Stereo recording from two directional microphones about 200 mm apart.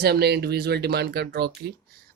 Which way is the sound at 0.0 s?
55° right (ahead or behind).